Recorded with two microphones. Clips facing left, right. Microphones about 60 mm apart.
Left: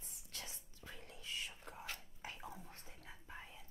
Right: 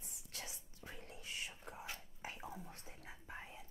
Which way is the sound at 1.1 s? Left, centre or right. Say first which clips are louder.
Left 2 dB; centre.